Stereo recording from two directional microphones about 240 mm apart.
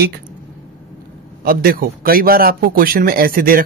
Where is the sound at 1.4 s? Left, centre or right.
Right.